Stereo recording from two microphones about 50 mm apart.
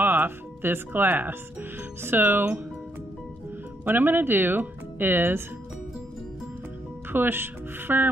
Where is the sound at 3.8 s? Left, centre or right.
Right.